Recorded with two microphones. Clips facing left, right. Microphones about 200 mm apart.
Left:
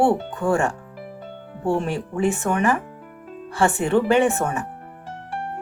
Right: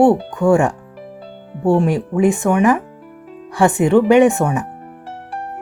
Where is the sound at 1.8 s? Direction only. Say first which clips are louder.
Right 7 dB; 15° right (ahead or behind).